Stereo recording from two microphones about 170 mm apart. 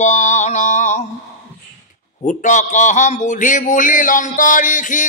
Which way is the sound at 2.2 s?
45° left (ahead or behind).